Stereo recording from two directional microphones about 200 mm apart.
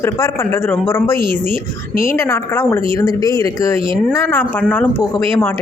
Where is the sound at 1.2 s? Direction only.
45° left (ahead or behind).